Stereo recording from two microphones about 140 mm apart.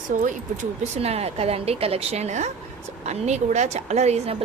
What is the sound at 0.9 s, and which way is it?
A woman's voice, 50° right (ahead or behind).